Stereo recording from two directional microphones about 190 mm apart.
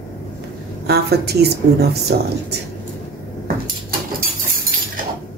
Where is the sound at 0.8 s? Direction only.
55° right (ahead or behind).